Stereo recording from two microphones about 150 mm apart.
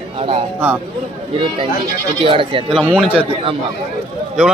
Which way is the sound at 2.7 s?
Centre (ahead or behind).